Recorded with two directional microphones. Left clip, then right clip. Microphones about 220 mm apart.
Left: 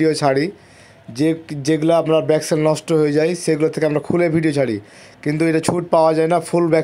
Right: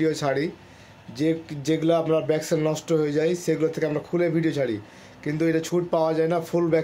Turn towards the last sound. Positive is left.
turn(degrees=35)  # may be behind; listen again after turning